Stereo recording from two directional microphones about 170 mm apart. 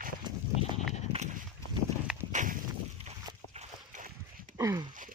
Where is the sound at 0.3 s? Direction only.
25° right (ahead or behind).